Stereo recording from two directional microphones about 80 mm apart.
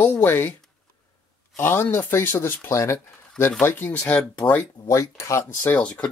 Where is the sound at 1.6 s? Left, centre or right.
Left.